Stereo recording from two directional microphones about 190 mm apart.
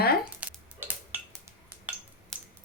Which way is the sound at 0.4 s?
5° right (ahead or behind).